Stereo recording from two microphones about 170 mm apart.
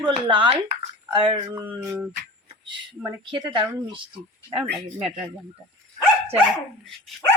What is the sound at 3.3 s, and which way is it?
Speech, 30° right (ahead or behind).